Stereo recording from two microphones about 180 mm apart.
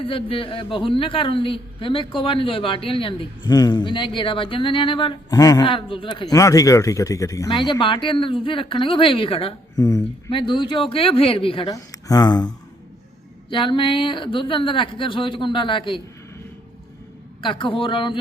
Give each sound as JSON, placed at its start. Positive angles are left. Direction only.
{"t": 0.0, "sound": "a man's voice", "side_deg": 30}
{"t": 11.7, "sound": "a man's voice", "side_deg": 20}
{"t": 17.4, "sound": "a man's voice", "side_deg": 30}